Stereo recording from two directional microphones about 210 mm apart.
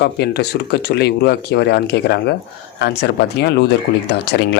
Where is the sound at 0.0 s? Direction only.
50° left (ahead or behind).